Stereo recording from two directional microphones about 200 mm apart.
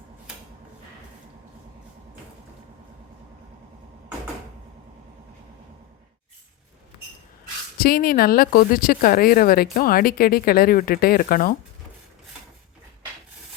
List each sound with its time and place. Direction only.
7.8 s speech: 50° left (ahead or behind)